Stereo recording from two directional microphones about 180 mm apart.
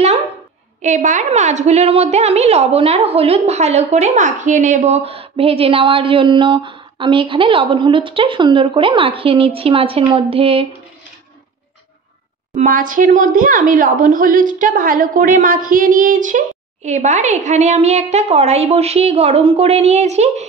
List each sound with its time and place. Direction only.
0.8 s a woman's voice: 45° right (ahead or behind)
12.6 s a woman's voice: 50° right (ahead or behind)